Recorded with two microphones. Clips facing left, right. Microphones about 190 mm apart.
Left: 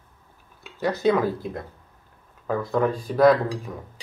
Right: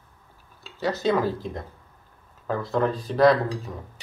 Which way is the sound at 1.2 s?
10° left (ahead or behind).